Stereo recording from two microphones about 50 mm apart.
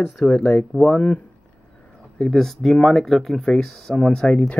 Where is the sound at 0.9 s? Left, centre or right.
Left.